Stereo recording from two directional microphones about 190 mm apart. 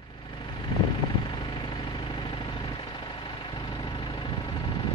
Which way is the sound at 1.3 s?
25° left (ahead or behind).